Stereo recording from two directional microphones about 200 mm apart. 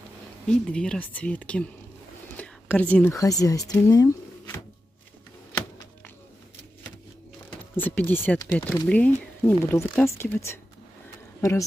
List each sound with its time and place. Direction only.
0.5 s speech: 5° left (ahead or behind)
7.7 s speech: 10° left (ahead or behind)